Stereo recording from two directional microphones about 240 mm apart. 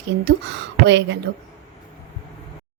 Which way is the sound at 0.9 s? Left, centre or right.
Right.